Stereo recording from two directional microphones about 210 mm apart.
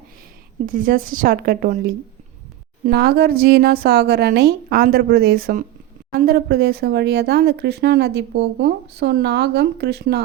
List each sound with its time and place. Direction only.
0.6 s a woman's voice: 40° right (ahead or behind)